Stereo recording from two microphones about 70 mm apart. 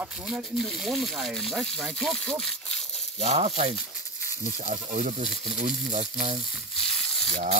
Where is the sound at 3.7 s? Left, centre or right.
Centre.